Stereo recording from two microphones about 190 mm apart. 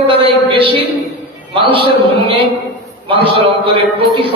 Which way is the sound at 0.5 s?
30° right (ahead or behind).